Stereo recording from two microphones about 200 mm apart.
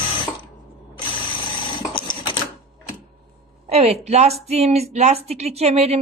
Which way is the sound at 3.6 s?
30° right (ahead or behind).